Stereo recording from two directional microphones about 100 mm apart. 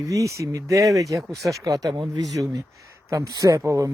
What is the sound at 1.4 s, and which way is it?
Speech, centre (ahead or behind).